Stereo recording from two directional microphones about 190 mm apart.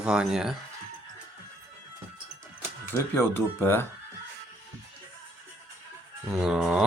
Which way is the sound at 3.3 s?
10° left (ahead or behind).